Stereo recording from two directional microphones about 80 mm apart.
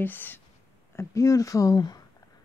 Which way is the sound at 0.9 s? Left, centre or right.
Left.